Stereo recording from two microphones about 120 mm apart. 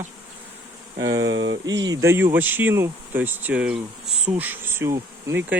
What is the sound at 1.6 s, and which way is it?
Speech, 35° right (ahead or behind).